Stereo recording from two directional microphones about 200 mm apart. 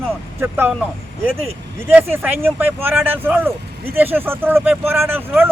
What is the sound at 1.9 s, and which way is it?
Speech, 10° right (ahead or behind).